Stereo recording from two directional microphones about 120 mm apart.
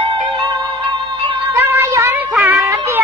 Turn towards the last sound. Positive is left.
turn(degrees=-20)  # may be behind; listen again after turning